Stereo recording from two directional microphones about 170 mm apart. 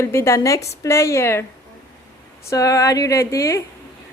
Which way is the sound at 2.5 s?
20° left (ahead or behind).